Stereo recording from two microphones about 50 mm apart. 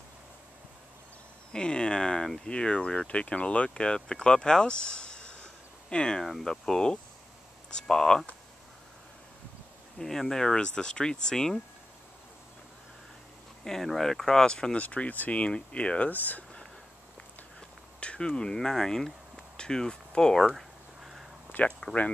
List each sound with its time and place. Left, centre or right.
1.5 s speech: centre
6.2 s speech: centre
9.9 s speech: centre
13.7 s speech: centre
14.8 s speech: left
16.1 s speech: left
18.0 s speech: left
20.5 s a sound: centre
21.8 s speech: left